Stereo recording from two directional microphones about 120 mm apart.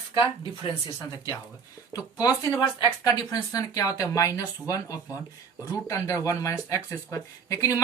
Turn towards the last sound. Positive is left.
turn(degrees=30)  # may be behind; listen again after turning